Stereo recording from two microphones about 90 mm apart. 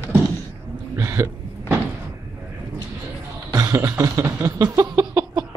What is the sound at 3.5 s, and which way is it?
Speech, 45° right (ahead or behind).